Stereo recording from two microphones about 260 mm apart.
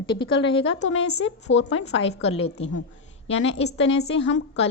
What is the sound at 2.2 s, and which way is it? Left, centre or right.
Speech, left.